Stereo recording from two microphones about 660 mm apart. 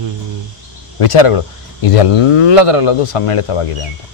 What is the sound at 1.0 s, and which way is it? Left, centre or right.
Speech, left.